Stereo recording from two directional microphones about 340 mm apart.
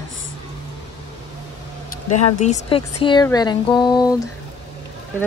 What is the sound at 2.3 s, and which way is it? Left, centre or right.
Speech, centre.